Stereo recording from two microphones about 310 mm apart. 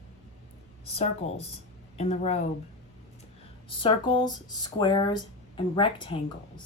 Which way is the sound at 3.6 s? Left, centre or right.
Centre.